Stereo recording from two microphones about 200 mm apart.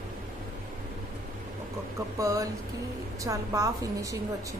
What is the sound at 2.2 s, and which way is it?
A woman's voice, 15° right (ahead or behind).